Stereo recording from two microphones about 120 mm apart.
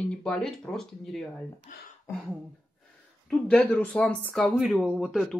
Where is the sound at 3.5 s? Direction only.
10° left (ahead or behind).